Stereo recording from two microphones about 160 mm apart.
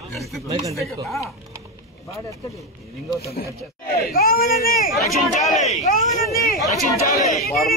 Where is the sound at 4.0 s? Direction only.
70° left (ahead or behind).